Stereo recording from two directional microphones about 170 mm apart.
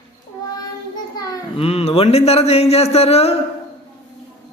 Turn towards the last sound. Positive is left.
turn(degrees=35)  # may be behind; listen again after turning